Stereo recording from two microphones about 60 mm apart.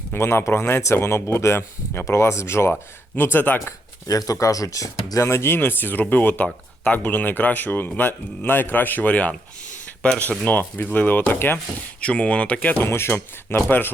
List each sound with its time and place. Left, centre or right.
0.1 s speech: left
3.2 s speech: left
4.0 s speech: left
5.5 s speech: left
11.9 s speech: centre
12.7 s speech: left